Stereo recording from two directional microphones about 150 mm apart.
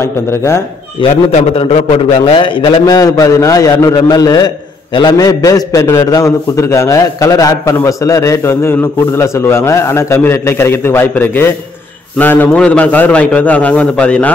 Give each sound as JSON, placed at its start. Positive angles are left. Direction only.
{"t": 1.1, "sound": "a man's voice", "side_deg": 45}